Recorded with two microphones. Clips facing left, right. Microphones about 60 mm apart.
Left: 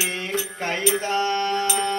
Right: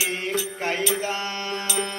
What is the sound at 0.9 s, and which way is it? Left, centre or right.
Mantra, centre.